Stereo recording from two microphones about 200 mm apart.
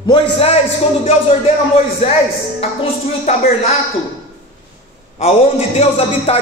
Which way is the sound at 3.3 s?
35° left (ahead or behind).